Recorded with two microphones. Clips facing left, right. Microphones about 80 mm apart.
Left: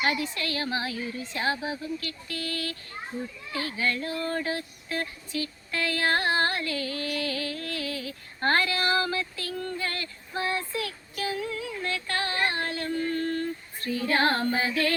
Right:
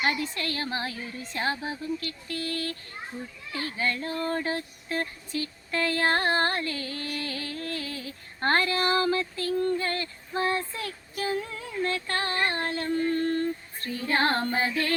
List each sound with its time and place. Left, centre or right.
0.0 s female singing: right
13.7 s music: right
14.1 s female singing: right